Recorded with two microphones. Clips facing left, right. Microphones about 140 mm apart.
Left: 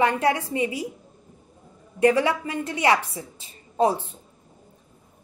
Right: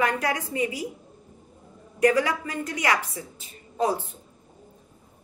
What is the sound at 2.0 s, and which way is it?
A woman's voice, 25° left (ahead or behind).